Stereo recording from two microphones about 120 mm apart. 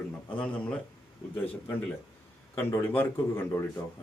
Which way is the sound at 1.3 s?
15° left (ahead or behind).